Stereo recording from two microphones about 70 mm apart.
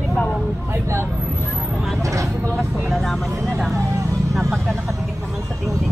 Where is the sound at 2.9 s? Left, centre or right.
Centre.